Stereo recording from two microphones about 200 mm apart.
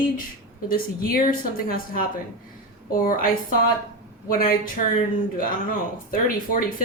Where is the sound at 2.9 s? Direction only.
45° left (ahead or behind).